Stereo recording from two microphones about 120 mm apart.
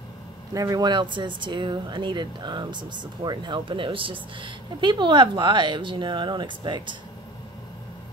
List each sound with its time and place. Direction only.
0.5 s speech: 30° right (ahead or behind)